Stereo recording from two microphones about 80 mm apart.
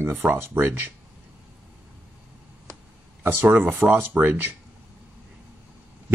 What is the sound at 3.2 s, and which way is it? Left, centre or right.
Speech, right.